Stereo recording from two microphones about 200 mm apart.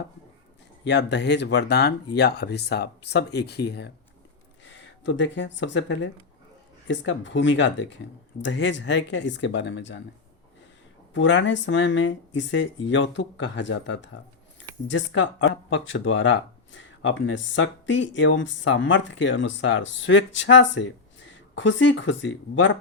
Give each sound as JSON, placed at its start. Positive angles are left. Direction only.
{"t": 0.9, "sound": "speech", "side_deg": 60}
{"t": 4.7, "sound": "speech", "side_deg": 70}
{"t": 11.1, "sound": "speech", "side_deg": 65}